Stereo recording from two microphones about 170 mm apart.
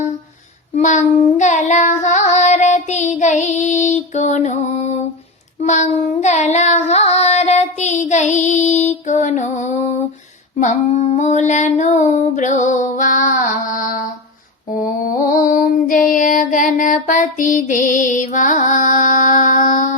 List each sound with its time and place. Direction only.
0.8 s child singing: 45° left (ahead or behind)
10.6 s female singing: 45° left (ahead or behind)
14.8 s mantra: 50° left (ahead or behind)